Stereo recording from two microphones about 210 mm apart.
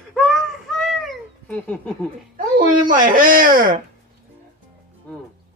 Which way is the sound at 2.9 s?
40° right (ahead or behind).